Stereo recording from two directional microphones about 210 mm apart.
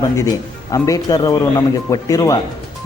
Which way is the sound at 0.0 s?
15° left (ahead or behind).